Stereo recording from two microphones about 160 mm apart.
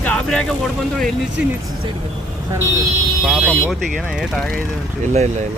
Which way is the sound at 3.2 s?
Centre (ahead or behind).